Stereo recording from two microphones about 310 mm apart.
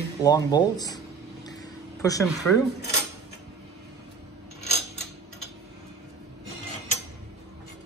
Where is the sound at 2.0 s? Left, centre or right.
Centre.